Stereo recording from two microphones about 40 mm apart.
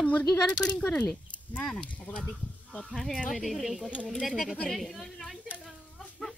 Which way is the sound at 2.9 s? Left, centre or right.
Centre.